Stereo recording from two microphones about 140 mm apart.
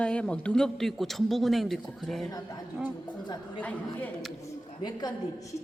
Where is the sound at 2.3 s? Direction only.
25° left (ahead or behind).